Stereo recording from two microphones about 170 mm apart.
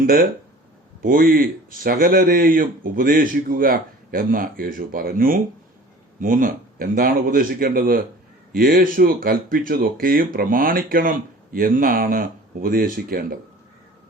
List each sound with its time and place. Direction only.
0.0 s speech: 55° right (ahead or behind)